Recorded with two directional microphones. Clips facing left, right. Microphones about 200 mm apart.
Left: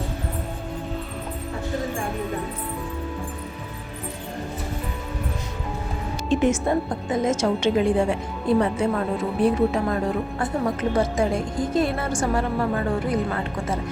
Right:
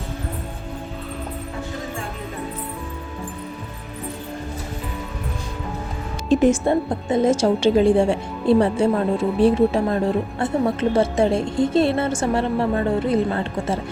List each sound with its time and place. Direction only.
6.2 s a woman's voice: 35° right (ahead or behind)